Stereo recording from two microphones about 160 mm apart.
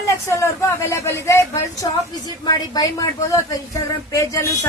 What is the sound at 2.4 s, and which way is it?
Speech, 25° left (ahead or behind).